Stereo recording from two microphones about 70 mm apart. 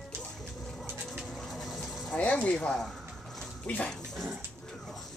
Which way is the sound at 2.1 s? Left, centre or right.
Centre.